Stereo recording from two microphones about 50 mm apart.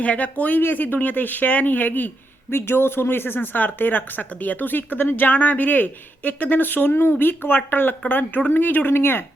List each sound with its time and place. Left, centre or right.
0.0 s speech: left
2.6 s speech: left
8.9 s speech: left